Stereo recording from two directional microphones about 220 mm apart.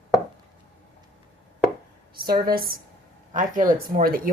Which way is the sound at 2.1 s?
45° right (ahead or behind).